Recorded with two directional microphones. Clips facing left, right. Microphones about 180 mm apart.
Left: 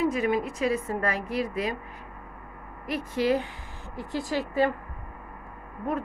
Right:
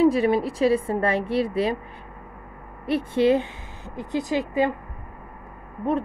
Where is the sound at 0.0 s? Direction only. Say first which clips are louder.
Right 6 dB; 35° right (ahead or behind).